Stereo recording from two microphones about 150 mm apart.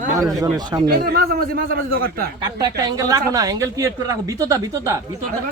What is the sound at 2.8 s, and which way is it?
Speech, 25° right (ahead or behind).